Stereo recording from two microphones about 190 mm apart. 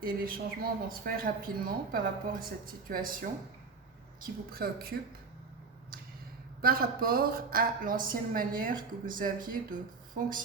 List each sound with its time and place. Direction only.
0.0 s a woman's voice: 50° right (ahead or behind)
4.5 s a woman's voice: 50° right (ahead or behind)
6.6 s a woman's voice: 50° right (ahead or behind)